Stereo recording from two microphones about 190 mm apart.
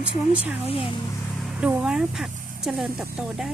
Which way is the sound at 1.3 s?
Centre (ahead or behind).